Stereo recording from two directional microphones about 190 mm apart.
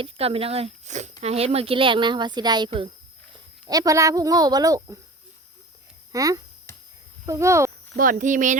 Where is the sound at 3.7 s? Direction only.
20° right (ahead or behind).